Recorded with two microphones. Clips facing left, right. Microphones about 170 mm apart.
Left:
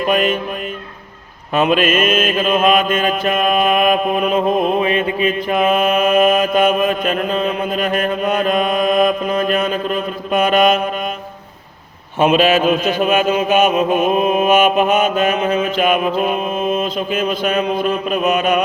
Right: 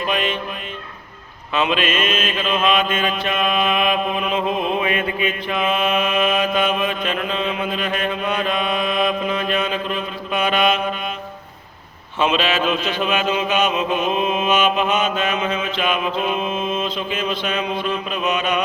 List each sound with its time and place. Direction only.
0.1 s mantra: 45° left (ahead or behind)
1.5 s mantra: 45° left (ahead or behind)
12.2 s mantra: 45° left (ahead or behind)